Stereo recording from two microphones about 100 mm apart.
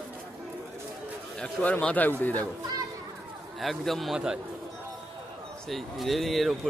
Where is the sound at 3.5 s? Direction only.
Centre (ahead or behind).